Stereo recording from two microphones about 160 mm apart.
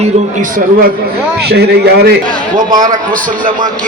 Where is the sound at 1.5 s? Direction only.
85° right.